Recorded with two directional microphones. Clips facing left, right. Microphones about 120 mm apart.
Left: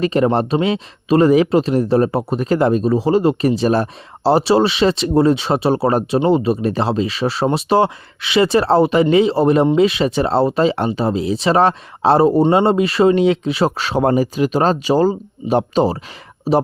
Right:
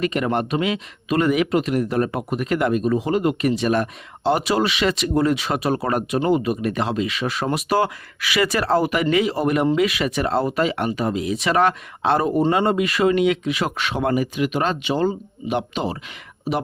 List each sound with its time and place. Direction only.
0.0 s speech: 30° left (ahead or behind)